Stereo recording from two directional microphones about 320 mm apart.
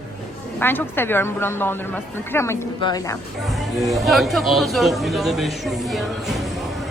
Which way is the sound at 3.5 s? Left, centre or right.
Centre.